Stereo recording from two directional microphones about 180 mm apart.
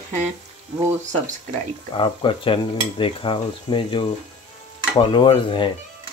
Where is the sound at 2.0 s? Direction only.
30° left (ahead or behind).